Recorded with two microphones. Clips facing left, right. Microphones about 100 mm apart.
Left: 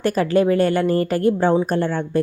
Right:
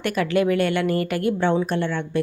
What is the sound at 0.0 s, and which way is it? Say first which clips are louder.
A woman's voice: left 4 dB; 35° left (ahead or behind).